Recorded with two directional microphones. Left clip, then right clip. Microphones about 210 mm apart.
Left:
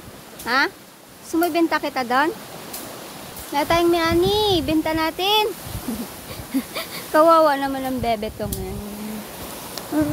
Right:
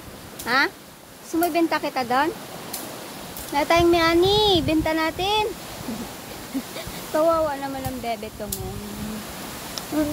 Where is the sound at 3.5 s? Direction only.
10° left (ahead or behind).